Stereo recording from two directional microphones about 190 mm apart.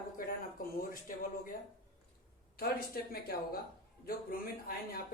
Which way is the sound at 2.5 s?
50° left (ahead or behind).